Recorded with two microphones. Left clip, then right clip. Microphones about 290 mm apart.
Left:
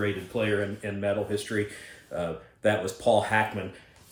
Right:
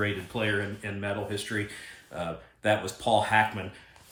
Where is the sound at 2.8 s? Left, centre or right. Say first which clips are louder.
Left 2 dB; centre.